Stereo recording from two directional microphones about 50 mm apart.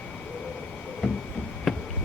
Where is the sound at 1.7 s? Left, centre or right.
Centre.